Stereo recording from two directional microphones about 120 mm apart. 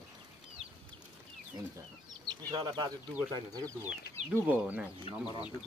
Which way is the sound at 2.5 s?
40° right (ahead or behind).